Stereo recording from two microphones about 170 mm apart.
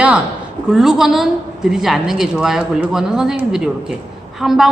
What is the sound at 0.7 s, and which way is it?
A woman's voice, centre (ahead or behind).